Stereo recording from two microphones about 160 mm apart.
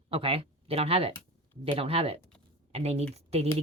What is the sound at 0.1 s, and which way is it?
A woman's voice, 35° right (ahead or behind).